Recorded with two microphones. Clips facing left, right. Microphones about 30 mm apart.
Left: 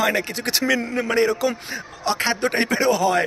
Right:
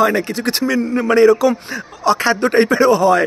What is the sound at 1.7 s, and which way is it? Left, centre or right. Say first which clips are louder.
Speech: right 8 dB; right.